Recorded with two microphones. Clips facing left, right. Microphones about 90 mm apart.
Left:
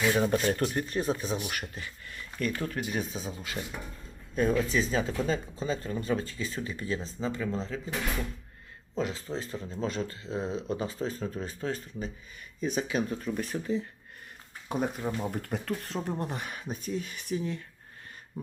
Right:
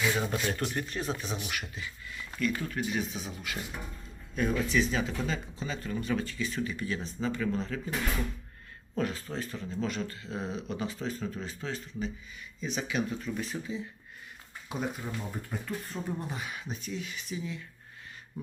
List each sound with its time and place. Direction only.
0.2 s speech: 40° left (ahead or behind); by 7.8 s 25° left (ahead or behind)
9.0 s speech: 20° left (ahead or behind); by 17.6 s 55° left (ahead or behind)